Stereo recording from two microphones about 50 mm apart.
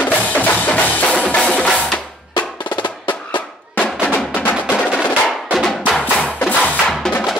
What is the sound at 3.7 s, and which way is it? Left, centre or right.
Percussion, left.